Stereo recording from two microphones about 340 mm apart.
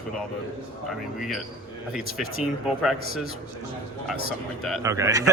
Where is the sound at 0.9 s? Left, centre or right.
Centre.